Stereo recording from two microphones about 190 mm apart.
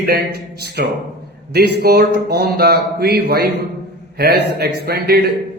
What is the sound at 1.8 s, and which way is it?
A man's voice, 55° right (ahead or behind).